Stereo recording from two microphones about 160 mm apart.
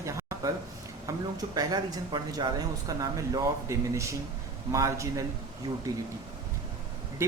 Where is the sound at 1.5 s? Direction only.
25° right (ahead or behind).